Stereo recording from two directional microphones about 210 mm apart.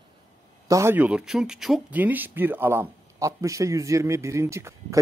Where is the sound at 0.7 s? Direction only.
15° right (ahead or behind).